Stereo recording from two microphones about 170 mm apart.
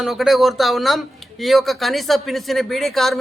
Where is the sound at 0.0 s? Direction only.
Centre (ahead or behind).